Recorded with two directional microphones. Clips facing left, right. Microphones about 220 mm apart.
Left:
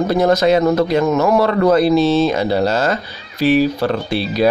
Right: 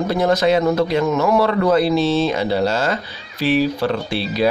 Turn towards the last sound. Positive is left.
turn(degrees=45)  # may be behind; listen again after turning